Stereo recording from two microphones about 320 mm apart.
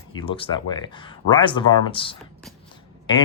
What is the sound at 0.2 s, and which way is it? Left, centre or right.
Speech, centre.